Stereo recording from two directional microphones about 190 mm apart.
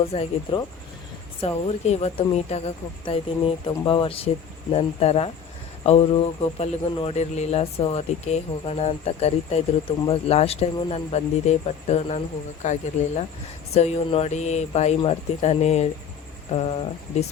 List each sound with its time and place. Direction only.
0.1 s speech: 30° left (ahead or behind)